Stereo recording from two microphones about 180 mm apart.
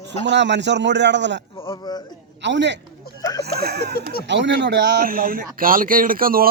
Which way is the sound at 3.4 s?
60° right (ahead or behind).